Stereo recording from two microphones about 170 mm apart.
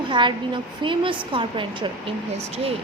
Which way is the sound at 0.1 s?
30° right (ahead or behind).